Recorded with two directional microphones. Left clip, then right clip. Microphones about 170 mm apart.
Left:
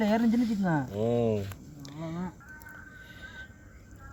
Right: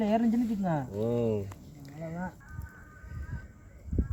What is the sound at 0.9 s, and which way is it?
Speech, centre (ahead or behind).